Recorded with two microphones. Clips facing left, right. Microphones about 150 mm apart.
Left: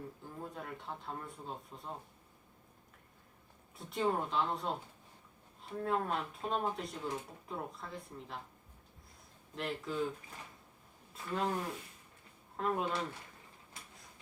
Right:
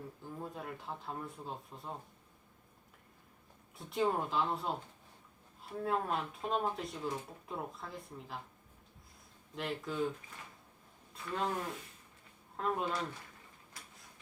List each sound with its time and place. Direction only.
0.2 s speech: centre (ahead or behind)
3.8 s speech: centre (ahead or behind)
5.8 s speech: centre (ahead or behind)
9.6 s speech: centre (ahead or behind)
11.1 s speech: 5° left (ahead or behind)